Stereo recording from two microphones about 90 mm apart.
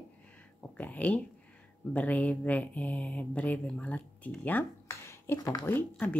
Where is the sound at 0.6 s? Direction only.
15° left (ahead or behind).